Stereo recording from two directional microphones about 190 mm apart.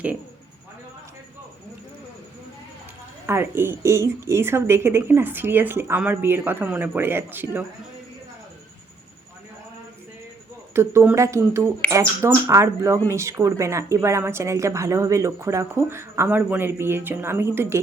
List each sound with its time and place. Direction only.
3.2 s speech: 10° right (ahead or behind)
10.8 s speech: 15° right (ahead or behind)